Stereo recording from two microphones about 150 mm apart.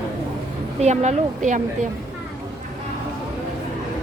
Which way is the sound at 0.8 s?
50° right (ahead or behind).